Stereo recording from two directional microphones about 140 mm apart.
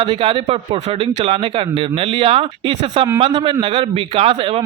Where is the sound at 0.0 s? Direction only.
40° right (ahead or behind).